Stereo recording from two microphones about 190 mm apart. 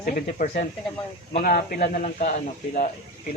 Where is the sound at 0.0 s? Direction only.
45° left (ahead or behind).